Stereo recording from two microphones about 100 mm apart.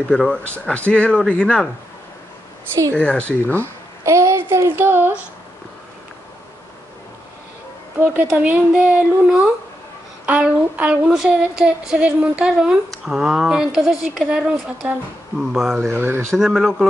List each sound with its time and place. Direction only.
0.1 s speech: 10° left (ahead or behind)
2.9 s speech: 10° left (ahead or behind)
3.6 s a woman's voice: 30° right (ahead or behind)
8.3 s a sound: 10° right (ahead or behind)
13.0 s speech: 5° right (ahead or behind)
15.9 s speech: 25° right (ahead or behind)
16.3 s speech: centre (ahead or behind)